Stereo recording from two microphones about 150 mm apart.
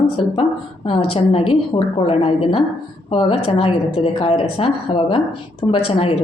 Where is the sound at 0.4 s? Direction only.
35° left (ahead or behind).